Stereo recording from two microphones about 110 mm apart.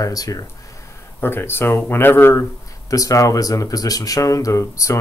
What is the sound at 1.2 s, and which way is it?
Speech, 20° left (ahead or behind).